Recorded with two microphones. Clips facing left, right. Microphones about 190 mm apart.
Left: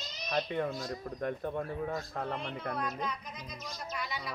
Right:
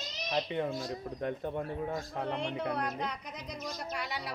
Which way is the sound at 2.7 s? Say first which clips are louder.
Right 1 dB; 70° right (ahead or behind).